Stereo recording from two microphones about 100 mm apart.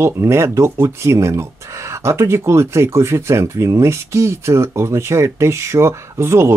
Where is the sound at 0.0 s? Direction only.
25° right (ahead or behind).